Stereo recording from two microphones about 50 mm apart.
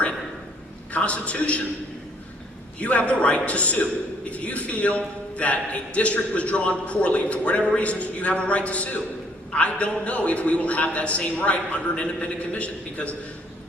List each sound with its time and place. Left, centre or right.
0.9 s a man's voice: left
2.8 s a man's voice: left